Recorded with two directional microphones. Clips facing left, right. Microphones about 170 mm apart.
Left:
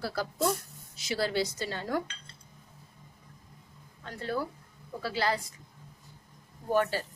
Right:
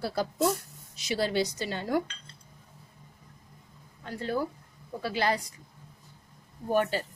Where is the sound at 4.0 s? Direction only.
15° right (ahead or behind).